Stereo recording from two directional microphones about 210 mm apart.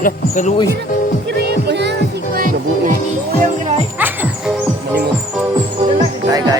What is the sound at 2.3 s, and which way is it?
Music, 40° right (ahead or behind).